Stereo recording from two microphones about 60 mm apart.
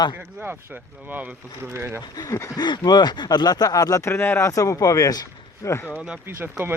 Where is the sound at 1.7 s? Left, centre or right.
Right.